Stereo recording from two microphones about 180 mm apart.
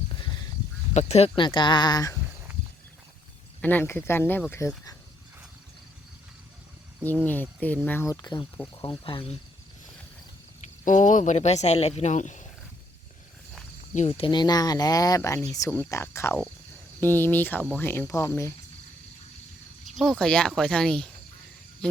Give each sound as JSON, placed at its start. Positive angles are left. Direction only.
{"t": 0.9, "sound": "speech", "side_deg": 35}
{"t": 3.6, "sound": "speech", "side_deg": 10}
{"t": 7.9, "sound": "speech", "side_deg": 15}
{"t": 10.8, "sound": "speech", "side_deg": 45}
{"t": 13.9, "sound": "speech", "side_deg": 40}
{"t": 14.3, "sound": "speech", "side_deg": 25}
{"t": 20.0, "sound": "speech", "side_deg": 5}